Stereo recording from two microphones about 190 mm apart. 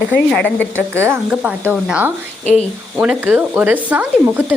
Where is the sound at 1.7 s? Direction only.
5° right (ahead or behind).